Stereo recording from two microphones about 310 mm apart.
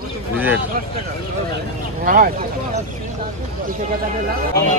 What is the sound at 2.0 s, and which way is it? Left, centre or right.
Speech, right.